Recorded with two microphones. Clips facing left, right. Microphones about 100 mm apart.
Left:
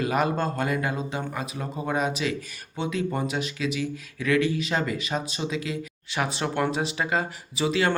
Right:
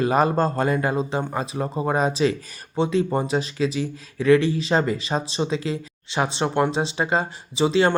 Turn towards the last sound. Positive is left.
turn(degrees=-30)  # may be behind; listen again after turning